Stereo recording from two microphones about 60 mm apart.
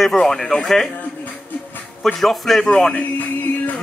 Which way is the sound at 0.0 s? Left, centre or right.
Centre.